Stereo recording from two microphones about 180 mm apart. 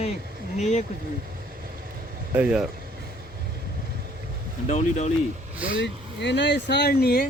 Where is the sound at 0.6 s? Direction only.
40° left (ahead or behind).